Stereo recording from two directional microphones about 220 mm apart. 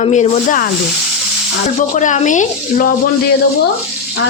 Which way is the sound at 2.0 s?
35° left (ahead or behind).